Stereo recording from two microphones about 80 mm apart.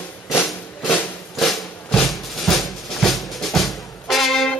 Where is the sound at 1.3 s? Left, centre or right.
Centre.